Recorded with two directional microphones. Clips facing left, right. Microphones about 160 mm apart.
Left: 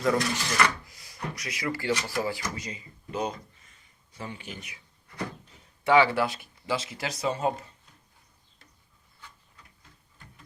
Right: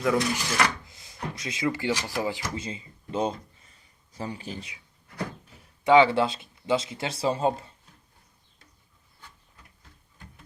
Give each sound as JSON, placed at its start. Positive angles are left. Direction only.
{"t": 0.2, "sound": "speech", "side_deg": -15}
{"t": 0.9, "sound": "speech", "side_deg": -25}
{"t": 5.8, "sound": "speech", "side_deg": -20}